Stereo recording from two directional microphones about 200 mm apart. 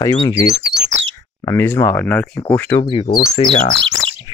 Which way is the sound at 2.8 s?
25° left (ahead or behind).